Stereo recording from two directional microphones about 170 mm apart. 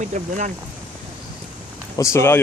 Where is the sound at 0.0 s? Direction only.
45° right (ahead or behind).